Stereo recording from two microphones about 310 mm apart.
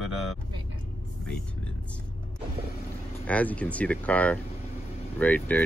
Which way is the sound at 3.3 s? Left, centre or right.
Centre.